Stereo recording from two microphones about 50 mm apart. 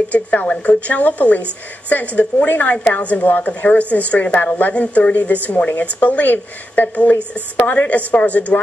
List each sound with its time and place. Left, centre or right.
0.1 s a woman's voice: left